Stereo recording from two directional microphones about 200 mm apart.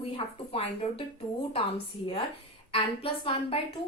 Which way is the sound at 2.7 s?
30° left (ahead or behind).